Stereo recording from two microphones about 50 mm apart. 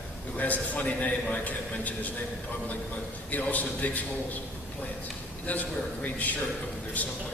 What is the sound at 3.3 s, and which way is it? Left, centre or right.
Speech, left.